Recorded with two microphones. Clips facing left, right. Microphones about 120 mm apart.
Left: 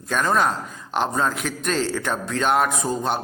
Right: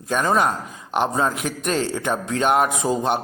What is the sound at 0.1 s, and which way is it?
Speech, 10° right (ahead or behind).